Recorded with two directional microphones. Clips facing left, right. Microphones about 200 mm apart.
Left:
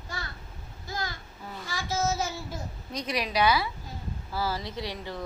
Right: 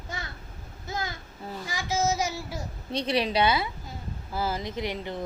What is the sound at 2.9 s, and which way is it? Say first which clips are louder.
Speech: right 3 dB; 30° right (ahead or behind).